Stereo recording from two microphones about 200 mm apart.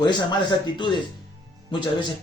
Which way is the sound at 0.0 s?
20° left (ahead or behind).